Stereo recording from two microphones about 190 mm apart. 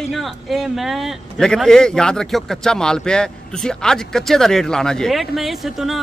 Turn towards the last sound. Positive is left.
turn(degrees=0)  # may be behind; listen again after turning